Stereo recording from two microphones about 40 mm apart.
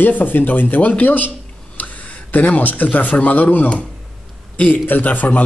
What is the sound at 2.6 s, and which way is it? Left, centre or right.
A man's voice, left.